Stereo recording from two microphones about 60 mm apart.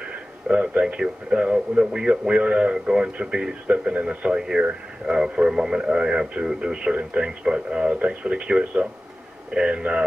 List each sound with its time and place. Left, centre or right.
0.1 s speech: right